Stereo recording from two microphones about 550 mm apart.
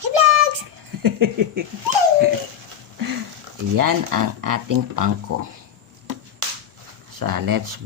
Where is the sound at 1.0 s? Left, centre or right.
Right.